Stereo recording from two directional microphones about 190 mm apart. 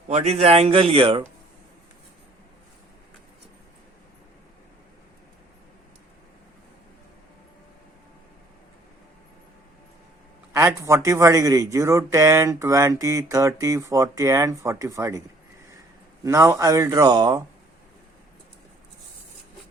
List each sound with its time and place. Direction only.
0.1 s a man's voice: 35° right (ahead or behind)
10.8 s speech: 15° right (ahead or behind)
16.2 s speech: 15° right (ahead or behind)